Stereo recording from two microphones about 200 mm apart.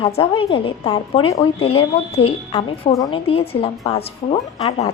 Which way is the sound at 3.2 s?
30° left (ahead or behind).